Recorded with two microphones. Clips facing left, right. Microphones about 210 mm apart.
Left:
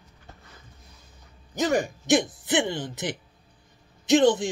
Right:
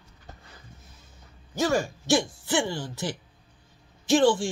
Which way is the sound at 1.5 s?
20° left (ahead or behind).